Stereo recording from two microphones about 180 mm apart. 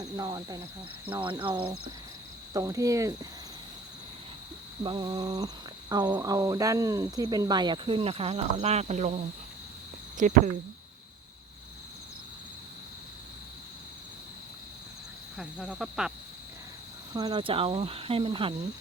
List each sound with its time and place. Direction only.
0.0 s speech: 20° right (ahead or behind)
4.8 s speech: 25° right (ahead or behind)
10.2 s speech: 45° right (ahead or behind)
15.4 s speech: 5° right (ahead or behind)
17.2 s cricket: 25° right (ahead or behind)